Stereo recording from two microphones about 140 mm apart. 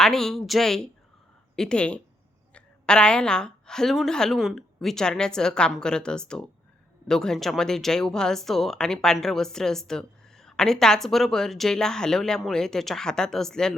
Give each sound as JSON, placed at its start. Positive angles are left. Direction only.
{"t": 0.0, "sound": "speech", "side_deg": 5}